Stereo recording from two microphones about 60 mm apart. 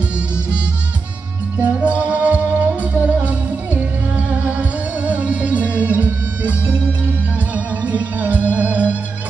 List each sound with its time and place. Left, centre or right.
1.6 s music: right